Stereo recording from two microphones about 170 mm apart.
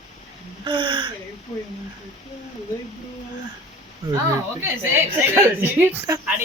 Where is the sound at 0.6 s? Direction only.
30° right (ahead or behind).